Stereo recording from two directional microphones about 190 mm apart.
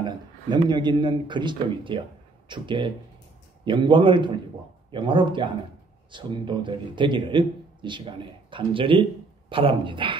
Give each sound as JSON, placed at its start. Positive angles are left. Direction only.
{"t": 0.0, "sound": "a man's voice", "side_deg": -25}